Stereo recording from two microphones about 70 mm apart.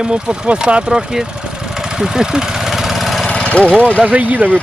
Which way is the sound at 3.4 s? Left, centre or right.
Centre.